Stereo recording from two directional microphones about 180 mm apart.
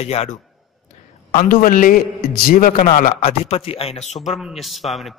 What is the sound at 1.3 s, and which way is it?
A man's voice, 50° left (ahead or behind).